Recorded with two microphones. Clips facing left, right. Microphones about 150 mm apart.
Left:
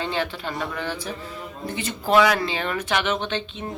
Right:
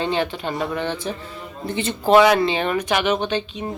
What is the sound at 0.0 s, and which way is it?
A woman's voice, 20° right (ahead or behind).